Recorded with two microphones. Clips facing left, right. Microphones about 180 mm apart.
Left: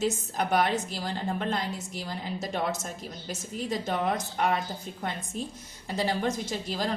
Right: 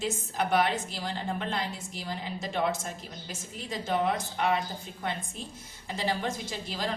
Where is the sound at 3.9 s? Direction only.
45° left (ahead or behind).